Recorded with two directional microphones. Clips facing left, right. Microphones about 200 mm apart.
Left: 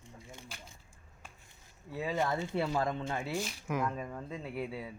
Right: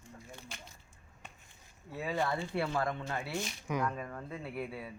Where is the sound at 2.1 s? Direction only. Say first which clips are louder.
Left 1 dB; 20° left (ahead or behind).